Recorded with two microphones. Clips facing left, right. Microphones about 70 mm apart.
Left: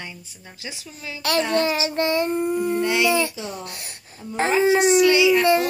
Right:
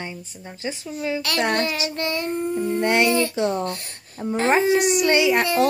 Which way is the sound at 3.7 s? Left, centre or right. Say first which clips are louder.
Right 7 dB; centre.